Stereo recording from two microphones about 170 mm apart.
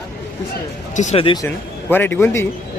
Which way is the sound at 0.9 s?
45° left (ahead or behind).